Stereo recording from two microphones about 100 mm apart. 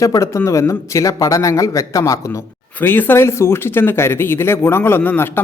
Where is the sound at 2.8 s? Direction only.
20° left (ahead or behind).